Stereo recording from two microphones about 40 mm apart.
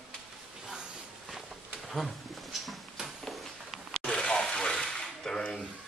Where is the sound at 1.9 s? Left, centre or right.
Centre.